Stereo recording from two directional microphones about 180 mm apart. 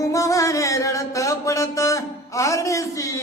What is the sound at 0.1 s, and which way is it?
Music, 20° left (ahead or behind).